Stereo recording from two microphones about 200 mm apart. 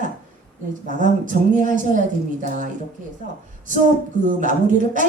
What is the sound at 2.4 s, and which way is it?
Speech, 40° right (ahead or behind).